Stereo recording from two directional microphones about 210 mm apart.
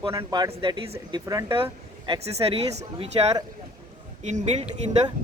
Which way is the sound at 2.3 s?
30° right (ahead or behind).